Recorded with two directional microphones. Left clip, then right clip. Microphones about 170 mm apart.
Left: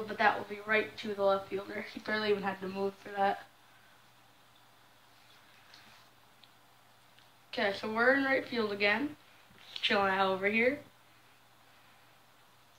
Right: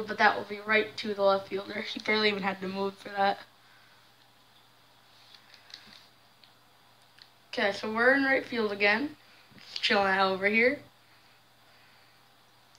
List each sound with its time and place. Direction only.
0.0 s speech: 30° right (ahead or behind)
7.5 s a woman's voice: 15° right (ahead or behind)